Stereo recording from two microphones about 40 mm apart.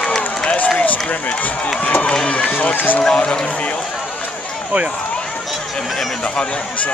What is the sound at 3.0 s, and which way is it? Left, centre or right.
Speech, left.